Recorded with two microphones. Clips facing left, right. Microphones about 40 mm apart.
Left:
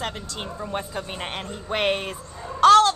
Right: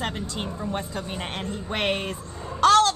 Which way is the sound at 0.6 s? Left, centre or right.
Centre.